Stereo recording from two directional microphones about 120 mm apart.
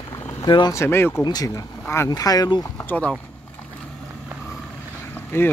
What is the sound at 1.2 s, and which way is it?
Speech, 30° left (ahead or behind).